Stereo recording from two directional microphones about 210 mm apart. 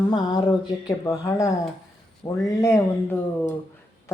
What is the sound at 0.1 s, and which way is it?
Speech, 20° left (ahead or behind).